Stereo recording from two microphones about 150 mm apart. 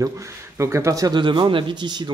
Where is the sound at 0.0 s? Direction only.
20° right (ahead or behind).